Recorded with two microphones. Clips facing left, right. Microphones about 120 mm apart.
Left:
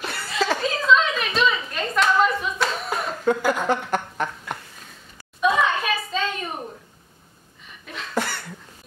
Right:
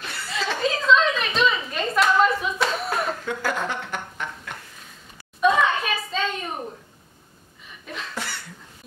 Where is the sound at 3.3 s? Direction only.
40° left (ahead or behind).